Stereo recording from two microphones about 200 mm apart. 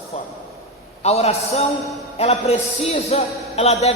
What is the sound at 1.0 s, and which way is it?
A man's voice, 30° left (ahead or behind).